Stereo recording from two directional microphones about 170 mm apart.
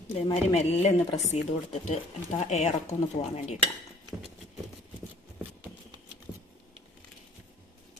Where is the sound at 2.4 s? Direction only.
40° left (ahead or behind).